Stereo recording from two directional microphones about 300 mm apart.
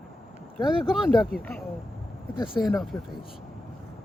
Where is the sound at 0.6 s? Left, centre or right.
Centre.